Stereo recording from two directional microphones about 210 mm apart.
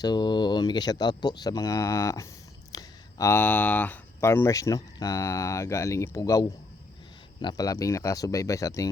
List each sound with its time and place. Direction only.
0.0 s speech: 20° left (ahead or behind)